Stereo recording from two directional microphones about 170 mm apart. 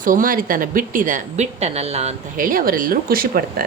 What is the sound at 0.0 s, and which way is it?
A woman's voice, 55° right (ahead or behind).